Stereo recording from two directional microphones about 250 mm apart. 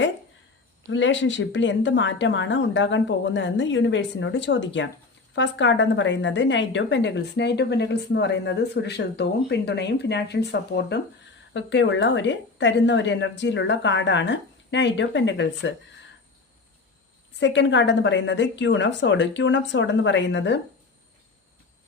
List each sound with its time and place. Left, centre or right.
0.9 s a woman's voice: left
17.4 s a woman's voice: left